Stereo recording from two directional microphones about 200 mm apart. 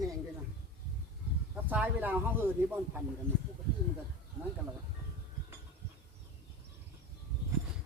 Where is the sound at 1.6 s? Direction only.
10° right (ahead or behind).